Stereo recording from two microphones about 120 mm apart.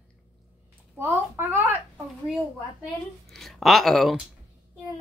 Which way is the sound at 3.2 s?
Centre (ahead or behind).